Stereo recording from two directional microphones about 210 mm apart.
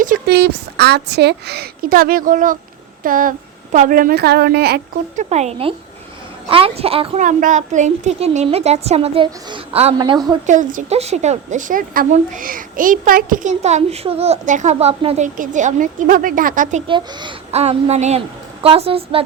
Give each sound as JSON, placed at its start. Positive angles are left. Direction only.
{"t": 0.0, "sound": "a woman's voice", "side_deg": -45}
{"t": 5.1, "sound": "speech", "side_deg": -30}
{"t": 10.4, "sound": "speech", "side_deg": -35}
{"t": 16.8, "sound": "speech", "side_deg": -20}